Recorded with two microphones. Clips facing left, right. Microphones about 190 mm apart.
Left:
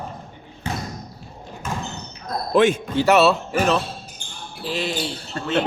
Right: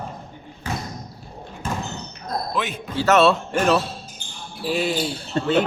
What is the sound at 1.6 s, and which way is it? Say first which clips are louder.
Basketball bounce: right 1 dB; 30° right (ahead or behind).